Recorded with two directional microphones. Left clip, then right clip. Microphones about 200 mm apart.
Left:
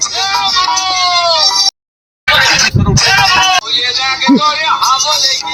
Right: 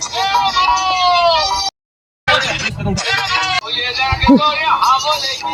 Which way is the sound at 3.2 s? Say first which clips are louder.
Left 7 dB; 35° left (ahead or behind).